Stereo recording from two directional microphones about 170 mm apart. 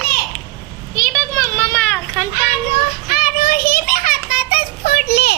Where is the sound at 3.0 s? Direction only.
65° left (ahead or behind).